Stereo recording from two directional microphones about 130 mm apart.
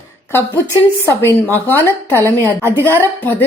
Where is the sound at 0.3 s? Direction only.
20° left (ahead or behind).